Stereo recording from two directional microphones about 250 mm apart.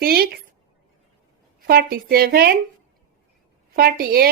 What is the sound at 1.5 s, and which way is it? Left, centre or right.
Speech, right.